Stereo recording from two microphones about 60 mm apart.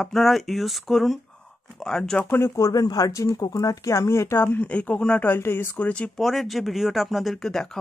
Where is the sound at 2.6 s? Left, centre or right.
Left.